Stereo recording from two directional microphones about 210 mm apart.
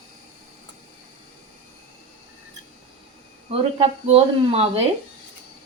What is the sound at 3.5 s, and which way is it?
A woman's voice, 30° right (ahead or behind).